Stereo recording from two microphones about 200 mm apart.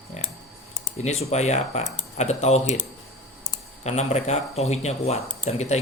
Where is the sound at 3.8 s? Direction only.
35° left (ahead or behind).